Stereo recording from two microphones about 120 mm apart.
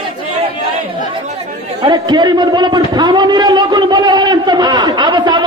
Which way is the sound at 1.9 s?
35° right (ahead or behind).